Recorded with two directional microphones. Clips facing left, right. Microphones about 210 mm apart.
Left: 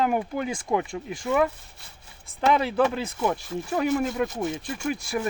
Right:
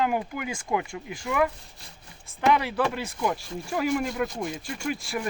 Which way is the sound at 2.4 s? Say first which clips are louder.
Left 2 dB; 25° left (ahead or behind).